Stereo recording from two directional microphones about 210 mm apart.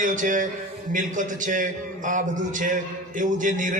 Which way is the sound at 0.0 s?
40° right (ahead or behind).